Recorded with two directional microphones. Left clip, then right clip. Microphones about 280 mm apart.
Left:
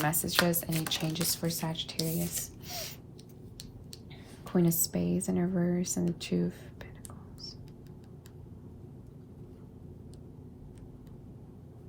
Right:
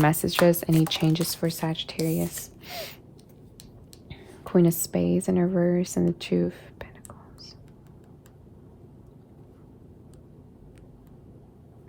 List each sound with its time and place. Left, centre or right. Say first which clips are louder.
0.0 s speech: right 8 dB; right
4.1 s speech: right 9 dB; right